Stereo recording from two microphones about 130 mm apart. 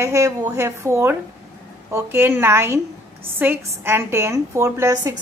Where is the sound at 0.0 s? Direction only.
25° right (ahead or behind).